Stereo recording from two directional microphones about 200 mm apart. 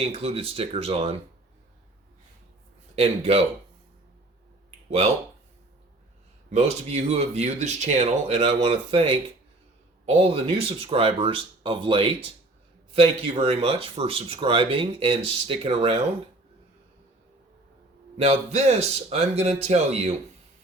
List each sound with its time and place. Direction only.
0.0 s speech: 30° right (ahead or behind)
2.9 s speech: 30° right (ahead or behind)
6.5 s speech: 30° right (ahead or behind)
10.2 s speech: 30° right (ahead or behind)
18.2 s speech: 30° right (ahead or behind)